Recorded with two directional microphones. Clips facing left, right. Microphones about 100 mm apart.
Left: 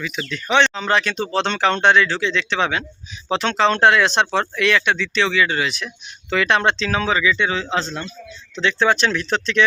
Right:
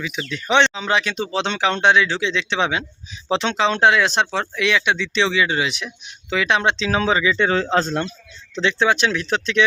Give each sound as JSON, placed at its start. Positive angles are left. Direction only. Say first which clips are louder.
{"t": 0.0, "sound": "speech", "louder": "even", "side_deg": -15}
{"t": 6.3, "sound": "speech", "louder": "left 1 dB", "side_deg": -5}
{"t": 6.9, "sound": "speech", "louder": "right 1 dB", "side_deg": -30}
{"t": 8.6, "sound": "speech", "louder": "left 1 dB", "side_deg": -15}